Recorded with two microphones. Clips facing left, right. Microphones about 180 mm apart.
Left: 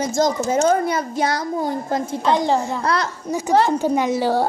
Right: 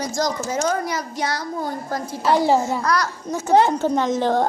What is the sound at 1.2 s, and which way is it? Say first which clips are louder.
Speech: left 3 dB; 50° left (ahead or behind).